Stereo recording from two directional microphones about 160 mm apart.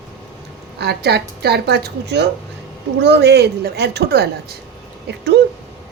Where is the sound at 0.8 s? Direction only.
90° right.